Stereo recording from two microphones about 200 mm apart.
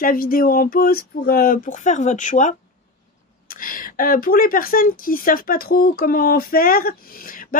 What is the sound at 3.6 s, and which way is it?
Speech, 45° left (ahead or behind).